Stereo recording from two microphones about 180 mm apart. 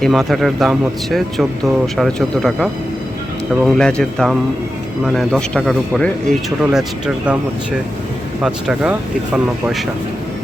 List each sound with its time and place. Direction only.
0.0 s speech: centre (ahead or behind)
8.4 s speech: 5° right (ahead or behind)